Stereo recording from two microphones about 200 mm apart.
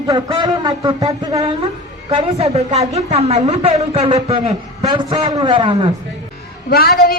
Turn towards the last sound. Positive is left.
turn(degrees=50)  # may be behind; listen again after turning